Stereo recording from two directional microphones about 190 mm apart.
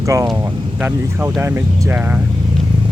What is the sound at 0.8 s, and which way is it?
Speech, 10° right (ahead or behind).